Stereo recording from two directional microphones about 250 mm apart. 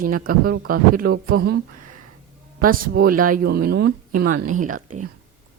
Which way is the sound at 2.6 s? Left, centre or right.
Right.